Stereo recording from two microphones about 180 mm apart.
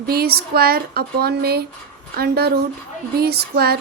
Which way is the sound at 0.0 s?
60° right (ahead or behind).